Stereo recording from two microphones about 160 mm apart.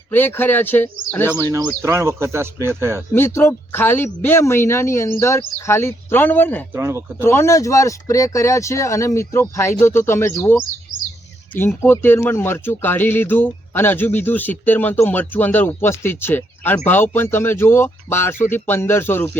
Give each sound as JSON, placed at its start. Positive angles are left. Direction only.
{"t": 0.1, "sound": "speech", "side_deg": 10}
{"t": 1.3, "sound": "speech", "side_deg": -20}
{"t": 3.1, "sound": "speech", "side_deg": 15}
{"t": 6.7, "sound": "speech", "side_deg": -15}
{"t": 7.2, "sound": "speech", "side_deg": 15}